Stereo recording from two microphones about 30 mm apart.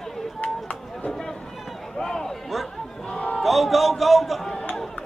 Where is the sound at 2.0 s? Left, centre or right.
Centre.